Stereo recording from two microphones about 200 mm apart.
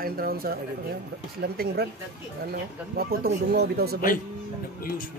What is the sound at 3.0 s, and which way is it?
Speech, 50° right (ahead or behind).